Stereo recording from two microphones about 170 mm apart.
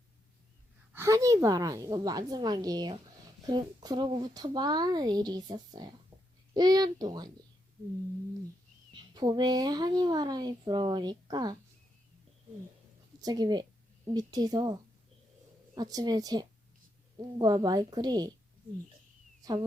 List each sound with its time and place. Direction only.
0.9 s a woman's voice: 20° right (ahead or behind)
8.9 s a woman's voice: 25° right (ahead or behind)
13.2 s a woman's voice: 25° right (ahead or behind)